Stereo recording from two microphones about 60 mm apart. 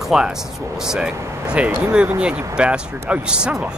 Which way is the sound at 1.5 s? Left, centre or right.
Right.